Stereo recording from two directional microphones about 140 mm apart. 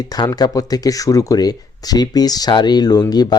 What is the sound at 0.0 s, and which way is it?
Speech, 25° left (ahead or behind).